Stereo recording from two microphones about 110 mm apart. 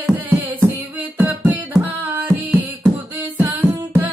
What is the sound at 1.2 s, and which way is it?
Music, 15° right (ahead or behind).